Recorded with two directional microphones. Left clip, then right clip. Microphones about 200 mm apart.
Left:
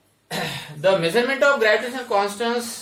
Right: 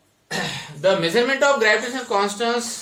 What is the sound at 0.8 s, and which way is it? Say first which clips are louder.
Speech: even; 25° right (ahead or behind).